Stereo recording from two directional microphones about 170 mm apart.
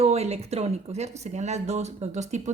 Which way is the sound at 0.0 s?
40° right (ahead or behind).